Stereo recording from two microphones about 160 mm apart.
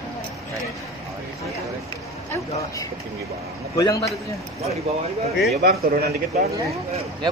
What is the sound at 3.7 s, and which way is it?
Speech, 20° left (ahead or behind).